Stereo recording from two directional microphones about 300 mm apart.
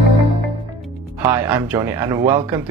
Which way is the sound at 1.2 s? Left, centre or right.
Centre.